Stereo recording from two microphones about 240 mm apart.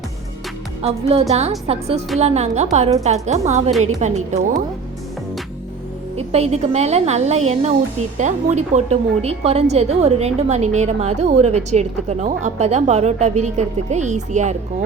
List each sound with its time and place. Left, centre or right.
0.8 s a woman's voice: right
6.1 s a woman's voice: right